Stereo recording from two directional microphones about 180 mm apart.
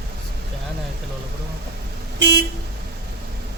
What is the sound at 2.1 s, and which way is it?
Vehicle, 70° right (ahead or behind).